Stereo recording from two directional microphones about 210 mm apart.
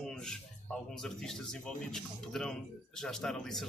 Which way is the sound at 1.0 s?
5° left (ahead or behind).